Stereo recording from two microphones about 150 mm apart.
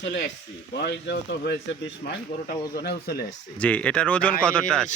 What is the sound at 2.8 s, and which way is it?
Speech, 90° left.